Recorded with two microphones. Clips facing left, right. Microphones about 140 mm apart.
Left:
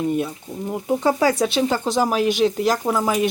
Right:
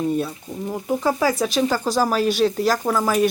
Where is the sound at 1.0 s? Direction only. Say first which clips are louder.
Left 2 dB; 30° left (ahead or behind).